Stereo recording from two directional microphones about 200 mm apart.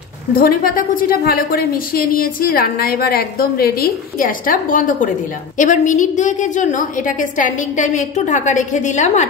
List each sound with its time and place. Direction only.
0.4 s a woman's voice: 45° left (ahead or behind)